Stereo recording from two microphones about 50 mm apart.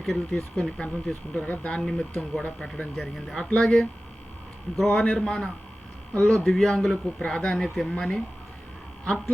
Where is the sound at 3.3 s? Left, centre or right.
Centre.